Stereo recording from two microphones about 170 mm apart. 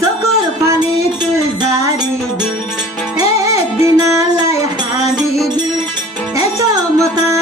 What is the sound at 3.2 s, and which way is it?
Music, 20° right (ahead or behind).